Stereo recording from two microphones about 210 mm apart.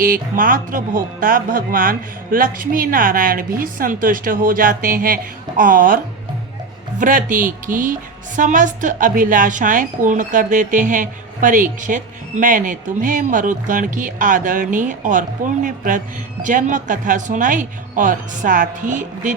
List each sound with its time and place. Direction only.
0.0 s speech: 40° right (ahead or behind)
7.0 s speech: 40° right (ahead or behind)